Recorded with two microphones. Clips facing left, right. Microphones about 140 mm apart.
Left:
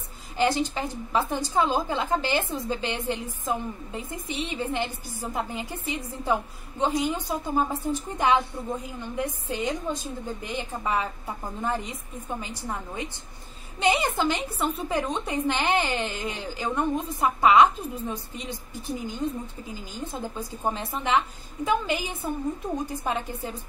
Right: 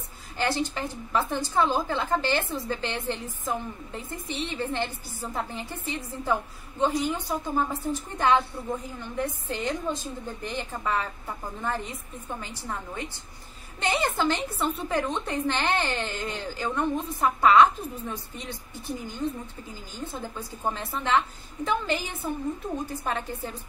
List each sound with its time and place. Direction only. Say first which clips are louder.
0.4 s a woman's voice: left 3 dB; 15° left (ahead or behind)